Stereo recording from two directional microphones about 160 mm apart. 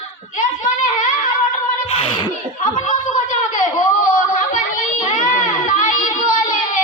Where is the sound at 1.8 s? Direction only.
35° left (ahead or behind).